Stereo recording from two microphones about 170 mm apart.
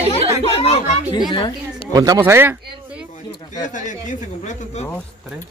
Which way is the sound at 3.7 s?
45° left (ahead or behind).